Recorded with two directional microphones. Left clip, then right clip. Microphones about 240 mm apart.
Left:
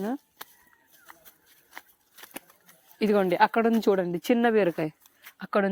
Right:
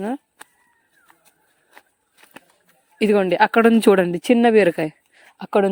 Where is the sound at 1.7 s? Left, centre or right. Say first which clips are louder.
Left 3 dB; left.